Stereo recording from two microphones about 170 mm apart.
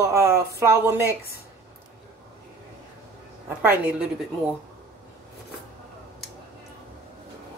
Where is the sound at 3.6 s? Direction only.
10° right (ahead or behind).